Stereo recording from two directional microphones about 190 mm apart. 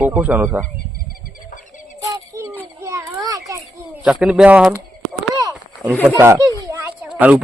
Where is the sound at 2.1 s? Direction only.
15° right (ahead or behind).